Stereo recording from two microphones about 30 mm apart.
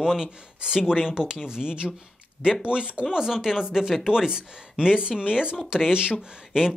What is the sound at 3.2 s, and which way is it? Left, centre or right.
Speech, centre.